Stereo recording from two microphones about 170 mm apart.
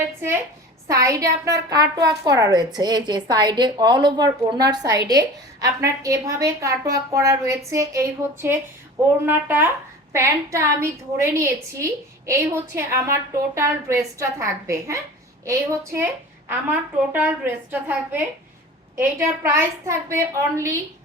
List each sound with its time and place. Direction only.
0.9 s a woman's voice: 20° right (ahead or behind)
17.1 s a woman's voice: 10° right (ahead or behind)